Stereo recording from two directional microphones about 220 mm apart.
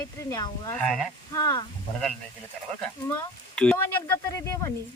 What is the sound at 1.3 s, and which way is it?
Speech, 15° left (ahead or behind).